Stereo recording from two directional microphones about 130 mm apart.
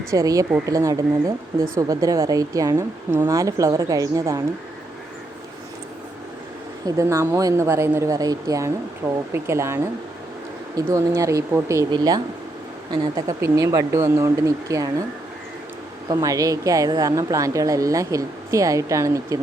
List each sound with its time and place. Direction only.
0.1 s a woman's voice: 25° right (ahead or behind)
6.8 s a woman's voice: 25° right (ahead or behind)
16.0 s a woman's voice: 25° right (ahead or behind)